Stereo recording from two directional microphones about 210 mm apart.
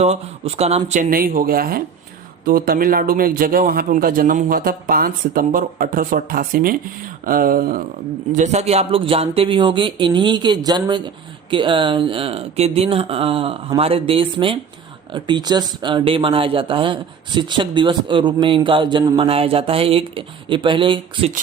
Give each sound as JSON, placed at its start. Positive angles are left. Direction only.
{"t": 0.0, "sound": "a man's voice", "side_deg": -30}